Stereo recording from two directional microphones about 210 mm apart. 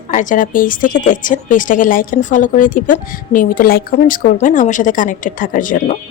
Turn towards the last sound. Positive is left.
turn(degrees=40)  # may be behind; listen again after turning